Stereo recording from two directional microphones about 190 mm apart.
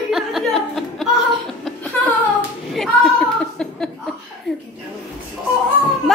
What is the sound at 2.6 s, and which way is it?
Chuckle, centre (ahead or behind).